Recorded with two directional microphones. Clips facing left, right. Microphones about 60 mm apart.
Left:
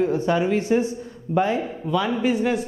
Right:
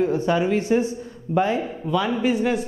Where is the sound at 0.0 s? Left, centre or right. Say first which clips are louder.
Even; centre.